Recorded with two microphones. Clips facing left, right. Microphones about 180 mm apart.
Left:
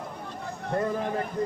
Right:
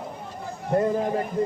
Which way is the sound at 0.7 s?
20° right (ahead or behind).